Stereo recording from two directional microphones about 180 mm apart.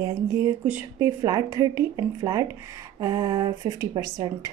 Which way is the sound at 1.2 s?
20° right (ahead or behind).